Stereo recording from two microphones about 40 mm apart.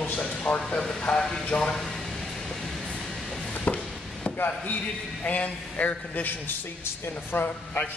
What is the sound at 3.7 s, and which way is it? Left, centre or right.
Chop, left.